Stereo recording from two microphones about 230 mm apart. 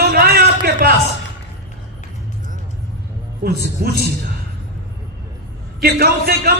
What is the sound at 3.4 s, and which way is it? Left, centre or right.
Speech, right.